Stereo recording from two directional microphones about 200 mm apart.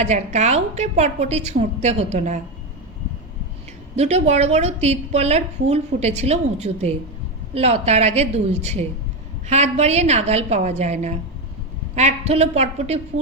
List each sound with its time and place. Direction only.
0.0 s a woman's voice: 35° right (ahead or behind)
3.9 s a woman's voice: 35° right (ahead or behind)